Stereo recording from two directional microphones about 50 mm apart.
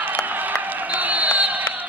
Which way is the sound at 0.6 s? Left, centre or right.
Right.